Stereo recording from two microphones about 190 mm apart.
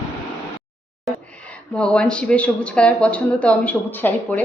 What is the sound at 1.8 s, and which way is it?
Speech, 5° left (ahead or behind).